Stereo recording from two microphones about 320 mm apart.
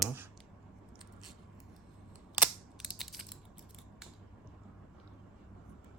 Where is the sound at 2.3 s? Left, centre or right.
Centre.